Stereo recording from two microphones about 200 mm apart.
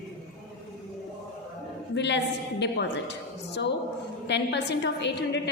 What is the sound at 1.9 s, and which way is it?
A woman's voice, 60° left (ahead or behind).